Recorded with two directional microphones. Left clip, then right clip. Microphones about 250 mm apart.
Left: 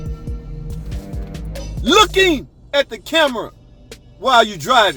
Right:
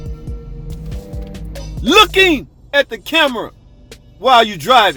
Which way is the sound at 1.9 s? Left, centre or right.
Centre.